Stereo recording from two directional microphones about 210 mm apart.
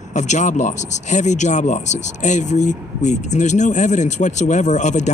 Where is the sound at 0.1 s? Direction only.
35° left (ahead or behind).